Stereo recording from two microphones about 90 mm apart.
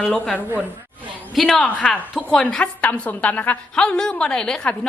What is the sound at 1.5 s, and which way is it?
A woman's voice, 15° left (ahead or behind).